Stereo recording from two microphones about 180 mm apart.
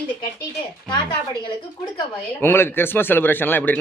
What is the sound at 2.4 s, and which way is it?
Speech, 15° left (ahead or behind).